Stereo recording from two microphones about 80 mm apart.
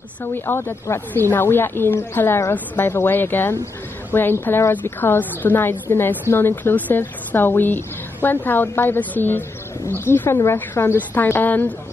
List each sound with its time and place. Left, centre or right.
0.2 s a woman's voice: left